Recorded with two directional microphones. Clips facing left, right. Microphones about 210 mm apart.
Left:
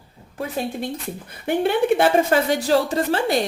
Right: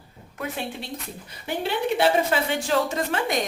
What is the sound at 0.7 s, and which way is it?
A woman's voice, 50° left (ahead or behind).